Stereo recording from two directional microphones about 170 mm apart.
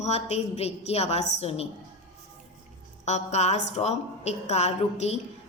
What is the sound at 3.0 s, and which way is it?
A woman's voice, 40° left (ahead or behind).